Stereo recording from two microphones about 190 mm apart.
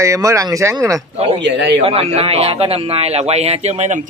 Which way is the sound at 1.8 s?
30° right (ahead or behind).